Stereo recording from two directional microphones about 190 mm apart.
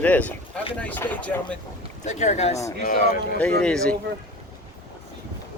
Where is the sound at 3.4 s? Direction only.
5° left (ahead or behind).